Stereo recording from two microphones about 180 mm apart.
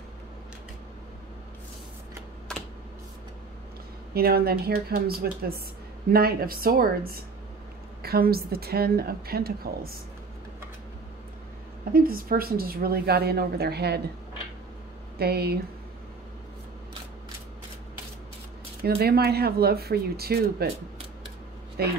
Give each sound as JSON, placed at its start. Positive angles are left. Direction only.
{"t": 4.1, "sound": "a woman's voice", "side_deg": -60}
{"t": 11.9, "sound": "a woman's voice", "side_deg": -55}
{"t": 15.1, "sound": "a woman's voice", "side_deg": -60}
{"t": 18.9, "sound": "a woman's voice", "side_deg": -60}
{"t": 21.8, "sound": "a woman's voice", "side_deg": -60}